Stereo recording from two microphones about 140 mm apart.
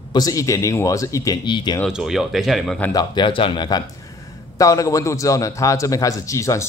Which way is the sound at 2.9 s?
30° left (ahead or behind).